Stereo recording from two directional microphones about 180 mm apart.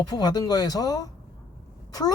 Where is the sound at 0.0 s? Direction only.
20° left (ahead or behind).